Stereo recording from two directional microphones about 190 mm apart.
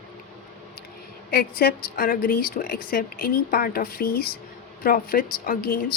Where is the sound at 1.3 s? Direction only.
50° left (ahead or behind).